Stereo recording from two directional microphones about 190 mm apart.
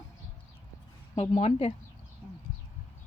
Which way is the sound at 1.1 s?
30° left (ahead or behind).